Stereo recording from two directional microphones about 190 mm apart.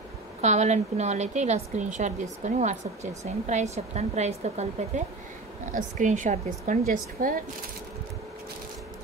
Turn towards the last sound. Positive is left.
turn(degrees=-45)  # may be behind; listen again after turning